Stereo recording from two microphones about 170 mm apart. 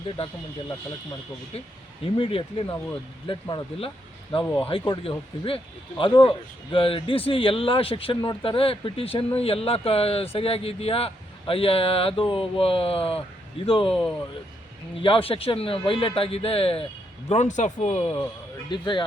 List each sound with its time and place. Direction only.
1.5 s speech: 35° left (ahead or behind)
4.4 s speech: 10° left (ahead or behind)
4.7 s speech: 30° left (ahead or behind)
15.0 s speech: 30° left (ahead or behind)
18.7 s speech: 25° left (ahead or behind)